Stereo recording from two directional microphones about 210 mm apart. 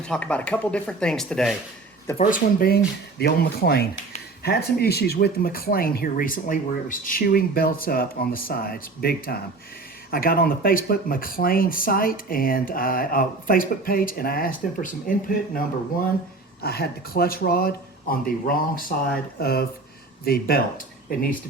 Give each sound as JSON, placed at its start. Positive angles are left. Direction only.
{"t": 0.0, "sound": "speech", "side_deg": 5}
{"t": 2.1, "sound": "speech", "side_deg": 40}